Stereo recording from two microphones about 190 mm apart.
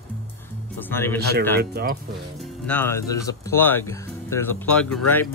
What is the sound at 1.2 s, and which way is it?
Speech, 60° right (ahead or behind).